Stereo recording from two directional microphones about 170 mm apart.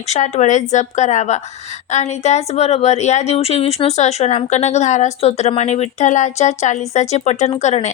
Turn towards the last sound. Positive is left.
turn(degrees=40)  # may be behind; listen again after turning